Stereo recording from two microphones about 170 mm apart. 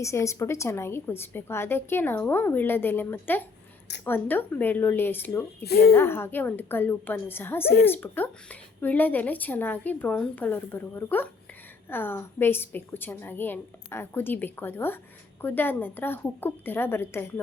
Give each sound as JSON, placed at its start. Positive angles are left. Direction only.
{"t": 0.0, "sound": "a woman's voice", "side_deg": 15}
{"t": 5.6, "sound": "a woman's voice", "side_deg": 70}
{"t": 5.9, "sound": "a woman's voice", "side_deg": 15}